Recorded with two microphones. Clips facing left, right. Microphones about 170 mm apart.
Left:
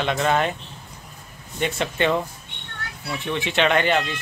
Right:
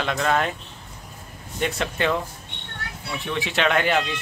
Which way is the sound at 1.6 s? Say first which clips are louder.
Left 2 dB; centre (ahead or behind).